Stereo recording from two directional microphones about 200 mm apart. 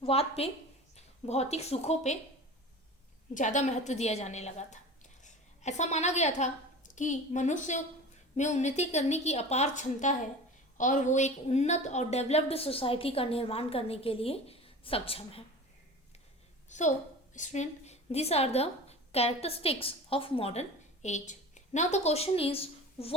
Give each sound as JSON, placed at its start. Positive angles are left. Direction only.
{"t": 0.0, "sound": "a woman's voice", "side_deg": 30}
{"t": 3.3, "sound": "a woman's voice", "side_deg": 35}
{"t": 16.7, "sound": "a woman's voice", "side_deg": 35}